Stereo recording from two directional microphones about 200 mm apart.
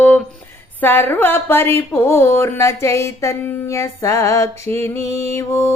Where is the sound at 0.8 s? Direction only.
10° left (ahead or behind).